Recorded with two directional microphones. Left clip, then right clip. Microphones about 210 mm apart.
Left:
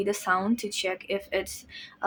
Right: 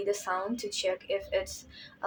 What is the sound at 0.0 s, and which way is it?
A woman's voice, 35° left (ahead or behind).